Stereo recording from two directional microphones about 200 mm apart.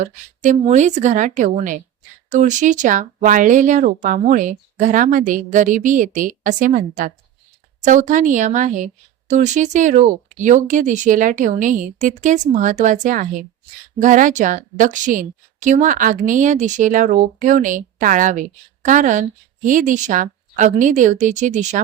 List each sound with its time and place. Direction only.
0.0 s a woman's voice: 35° right (ahead or behind)